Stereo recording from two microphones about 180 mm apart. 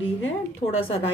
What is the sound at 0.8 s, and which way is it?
Speech, 30° left (ahead or behind).